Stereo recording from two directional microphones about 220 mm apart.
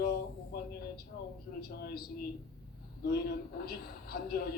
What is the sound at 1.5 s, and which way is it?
Speech, 45° left (ahead or behind).